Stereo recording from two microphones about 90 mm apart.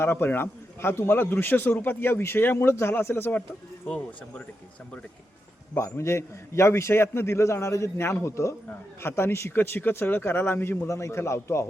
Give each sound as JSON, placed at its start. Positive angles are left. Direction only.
{"t": 0.0, "sound": "a man's voice", "side_deg": 25}
{"t": 3.8, "sound": "speech", "side_deg": 10}
{"t": 5.7, "sound": "a man's voice", "side_deg": 30}